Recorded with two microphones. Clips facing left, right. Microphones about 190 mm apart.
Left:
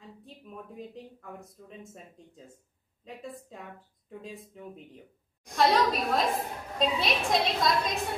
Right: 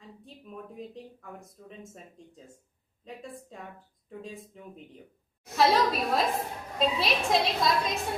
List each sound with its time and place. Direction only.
0.7 s a woman's voice: centre (ahead or behind)